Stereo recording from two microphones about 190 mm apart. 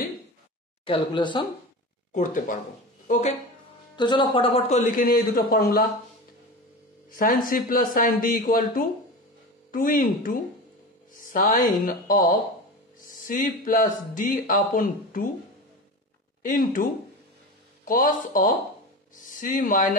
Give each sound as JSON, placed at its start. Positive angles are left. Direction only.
{"t": 0.8, "sound": "speech", "side_deg": 25}
{"t": 2.1, "sound": "speech", "side_deg": 45}
{"t": 3.9, "sound": "a man's voice", "side_deg": 25}
{"t": 7.1, "sound": "speech", "side_deg": 45}
{"t": 16.4, "sound": "speech", "side_deg": 45}
{"t": 17.8, "sound": "speech", "side_deg": 45}